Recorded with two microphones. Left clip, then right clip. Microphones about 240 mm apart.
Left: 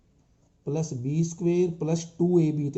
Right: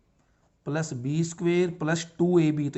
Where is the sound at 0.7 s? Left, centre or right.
Right.